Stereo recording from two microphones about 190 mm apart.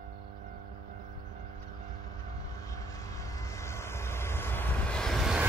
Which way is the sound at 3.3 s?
15° left (ahead or behind).